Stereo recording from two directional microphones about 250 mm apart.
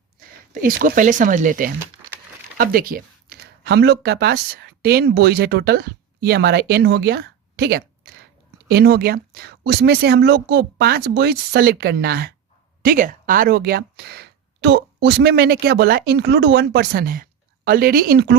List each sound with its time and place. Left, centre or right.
0.2 s speech: right